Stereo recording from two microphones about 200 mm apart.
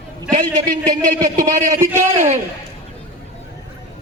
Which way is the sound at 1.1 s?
40° right (ahead or behind).